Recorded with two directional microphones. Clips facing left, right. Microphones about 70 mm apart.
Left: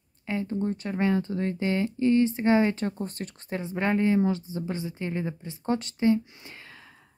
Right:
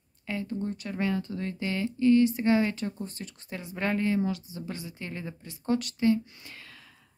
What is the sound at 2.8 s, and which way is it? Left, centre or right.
Speech, left.